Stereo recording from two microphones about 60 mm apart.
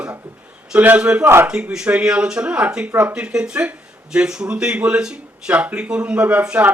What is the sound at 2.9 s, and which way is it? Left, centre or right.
Speech, right.